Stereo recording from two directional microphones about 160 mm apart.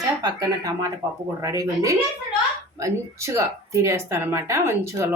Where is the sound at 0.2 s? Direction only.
25° right (ahead or behind).